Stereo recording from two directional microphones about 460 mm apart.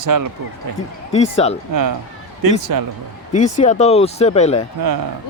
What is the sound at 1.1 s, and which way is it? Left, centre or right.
Speech, centre.